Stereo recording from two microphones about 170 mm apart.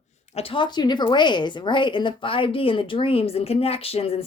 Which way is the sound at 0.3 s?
30° left (ahead or behind).